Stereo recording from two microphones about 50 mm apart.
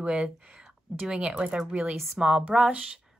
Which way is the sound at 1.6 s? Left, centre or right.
Centre.